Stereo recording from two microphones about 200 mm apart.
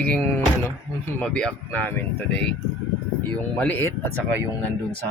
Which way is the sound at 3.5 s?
10° left (ahead or behind).